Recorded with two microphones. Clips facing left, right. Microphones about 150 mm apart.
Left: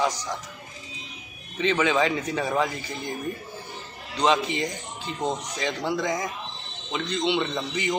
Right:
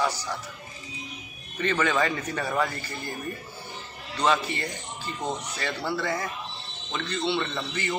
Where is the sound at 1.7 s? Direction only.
10° left (ahead or behind).